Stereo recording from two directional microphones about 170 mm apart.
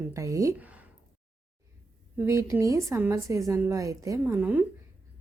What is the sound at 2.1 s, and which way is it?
A woman's voice, 15° right (ahead or behind).